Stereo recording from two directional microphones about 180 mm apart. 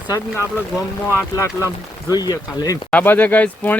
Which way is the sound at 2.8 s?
10° left (ahead or behind).